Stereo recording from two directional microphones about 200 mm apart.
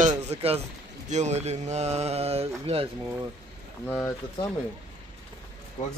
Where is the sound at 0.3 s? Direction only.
30° right (ahead or behind).